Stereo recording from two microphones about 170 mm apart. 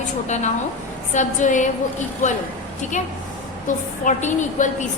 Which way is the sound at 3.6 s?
45° left (ahead or behind).